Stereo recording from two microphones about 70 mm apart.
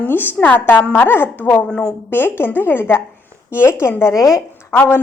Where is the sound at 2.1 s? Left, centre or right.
Left.